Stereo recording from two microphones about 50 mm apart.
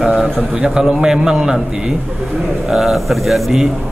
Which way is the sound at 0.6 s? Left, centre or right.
Centre.